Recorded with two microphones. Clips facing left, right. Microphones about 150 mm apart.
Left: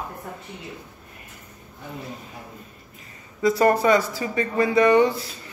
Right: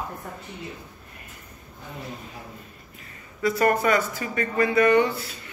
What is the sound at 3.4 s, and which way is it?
Speech, 35° left (ahead or behind).